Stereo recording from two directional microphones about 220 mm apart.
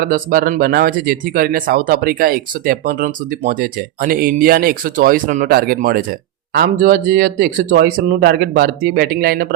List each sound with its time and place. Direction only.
0.0 s speech: 40° right (ahead or behind)